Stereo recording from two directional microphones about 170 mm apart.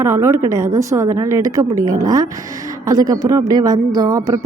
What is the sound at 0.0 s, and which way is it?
A woman's voice, 15° right (ahead or behind).